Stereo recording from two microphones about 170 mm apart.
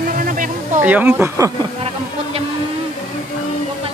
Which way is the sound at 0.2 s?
50° right (ahead or behind).